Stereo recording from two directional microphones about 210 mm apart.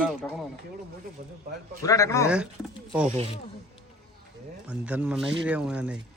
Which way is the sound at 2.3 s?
5° right (ahead or behind).